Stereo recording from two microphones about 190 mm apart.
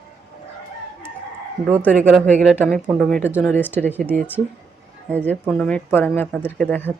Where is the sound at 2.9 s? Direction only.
5° left (ahead or behind).